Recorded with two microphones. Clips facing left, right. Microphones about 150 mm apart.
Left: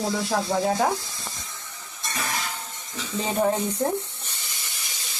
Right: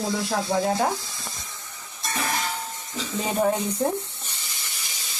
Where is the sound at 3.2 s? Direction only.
5° right (ahead or behind).